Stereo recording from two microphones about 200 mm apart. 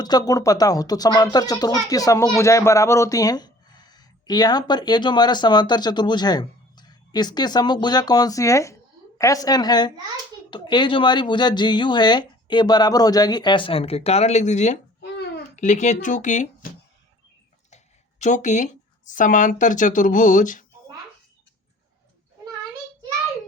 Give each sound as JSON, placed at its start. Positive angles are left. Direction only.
{"t": 0.0, "sound": "speech", "side_deg": 20}
{"t": 18.2, "sound": "speech", "side_deg": 35}